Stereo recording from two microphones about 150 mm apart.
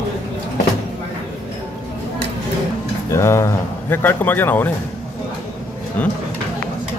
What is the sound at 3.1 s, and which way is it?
Speech, 20° left (ahead or behind).